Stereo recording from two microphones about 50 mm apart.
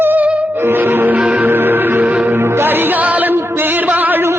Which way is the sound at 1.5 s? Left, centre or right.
Right.